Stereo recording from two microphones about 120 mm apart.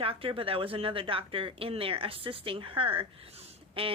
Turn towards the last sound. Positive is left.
turn(degrees=-50)  # may be behind; listen again after turning